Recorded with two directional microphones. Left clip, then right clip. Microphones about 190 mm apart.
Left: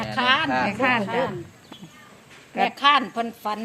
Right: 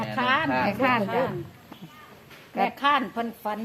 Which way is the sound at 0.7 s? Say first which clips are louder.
Left 2 dB; 10° left (ahead or behind).